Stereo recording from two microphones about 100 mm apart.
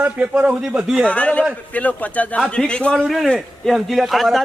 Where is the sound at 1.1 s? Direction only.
15° left (ahead or behind).